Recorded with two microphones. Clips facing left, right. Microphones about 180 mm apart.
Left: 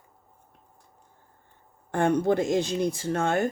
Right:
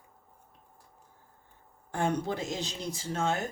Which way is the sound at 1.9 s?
60° left (ahead or behind).